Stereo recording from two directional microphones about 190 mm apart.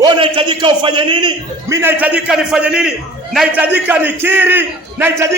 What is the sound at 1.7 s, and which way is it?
A man's voice, 10° right (ahead or behind).